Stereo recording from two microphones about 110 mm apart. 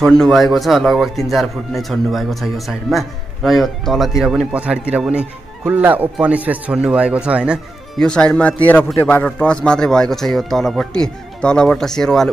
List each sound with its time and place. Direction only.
0.0 s a man's voice: 5° left (ahead or behind)
8.0 s speech: 10° left (ahead or behind)